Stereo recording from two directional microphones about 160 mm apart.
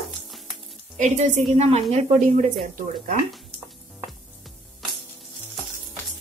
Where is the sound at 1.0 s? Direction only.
50° right (ahead or behind).